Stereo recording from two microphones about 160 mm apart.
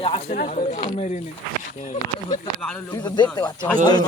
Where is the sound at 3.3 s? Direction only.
25° left (ahead or behind).